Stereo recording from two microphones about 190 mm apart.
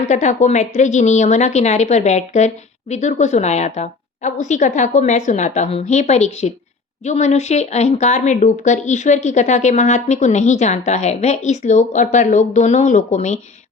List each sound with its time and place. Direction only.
0.0 s speech: 40° left (ahead or behind)